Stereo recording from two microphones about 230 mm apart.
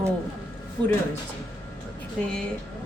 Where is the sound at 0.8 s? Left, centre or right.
Centre.